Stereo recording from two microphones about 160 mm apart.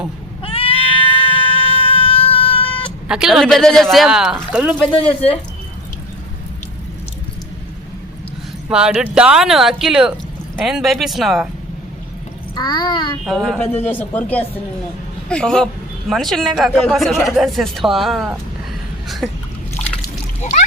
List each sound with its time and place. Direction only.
0.4 s a sound: 35° left (ahead or behind)
3.1 s speech: 5° right (ahead or behind)
4.9 s speech: 35° left (ahead or behind)
8.7 s speech: 5° right (ahead or behind)
12.5 s child singing: 25° left (ahead or behind)
13.2 s speech: centre (ahead or behind)
13.8 s speech: 10° left (ahead or behind)